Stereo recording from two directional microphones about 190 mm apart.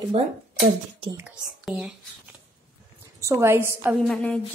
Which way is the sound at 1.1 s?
5° right (ahead or behind).